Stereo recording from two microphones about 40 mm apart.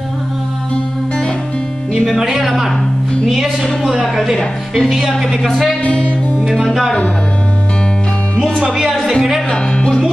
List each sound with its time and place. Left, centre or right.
2.1 s a woman's voice: centre
3.8 s speech: centre
5.9 s music: left
6.5 s speech: centre
8.9 s speech: centre
9.5 s speech: centre